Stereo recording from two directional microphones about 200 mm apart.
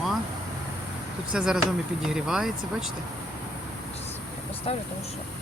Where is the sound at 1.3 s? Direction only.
5° right (ahead or behind).